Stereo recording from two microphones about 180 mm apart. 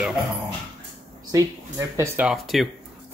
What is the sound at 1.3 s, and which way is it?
Speech, 15° right (ahead or behind).